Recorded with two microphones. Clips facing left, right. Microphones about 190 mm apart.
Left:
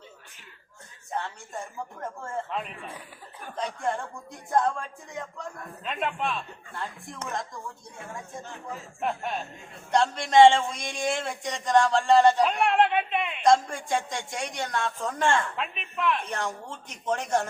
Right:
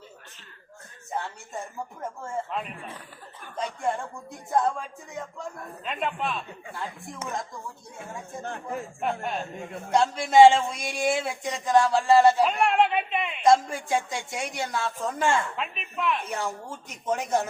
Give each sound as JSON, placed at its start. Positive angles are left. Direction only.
{"t": 2.0, "sound": "a man's voice", "side_deg": -5}
{"t": 3.8, "sound": "a man's voice", "side_deg": 0}
{"t": 8.4, "sound": "speech", "side_deg": -60}
{"t": 9.0, "sound": "a man's voice", "side_deg": 0}